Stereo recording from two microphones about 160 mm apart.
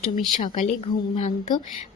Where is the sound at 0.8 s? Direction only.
40° left (ahead or behind).